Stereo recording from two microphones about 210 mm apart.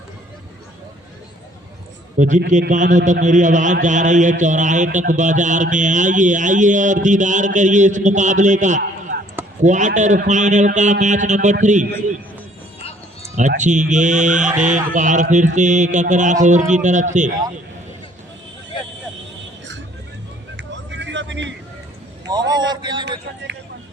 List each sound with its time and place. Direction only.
2.1 s a man's voice: 35° right (ahead or behind)
13.6 s a man's voice: 35° right (ahead or behind)
20.6 s vehicle: 55° right (ahead or behind)
22.3 s a sound: 20° right (ahead or behind)